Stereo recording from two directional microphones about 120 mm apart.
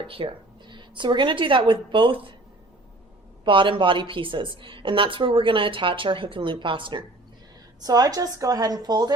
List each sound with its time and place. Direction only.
0.0 s a woman's voice: 45° right (ahead or behind)
3.4 s a woman's voice: 45° right (ahead or behind)
7.8 s speech: 35° right (ahead or behind)